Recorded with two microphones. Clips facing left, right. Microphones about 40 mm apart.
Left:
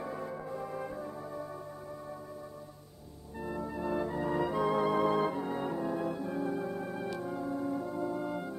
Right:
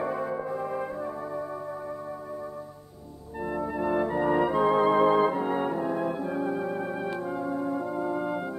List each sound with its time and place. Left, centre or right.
0.0 s music: right
3.4 s organ: right